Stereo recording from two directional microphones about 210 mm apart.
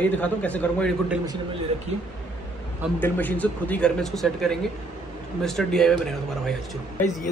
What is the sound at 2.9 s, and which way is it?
A man's voice, 10° left (ahead or behind).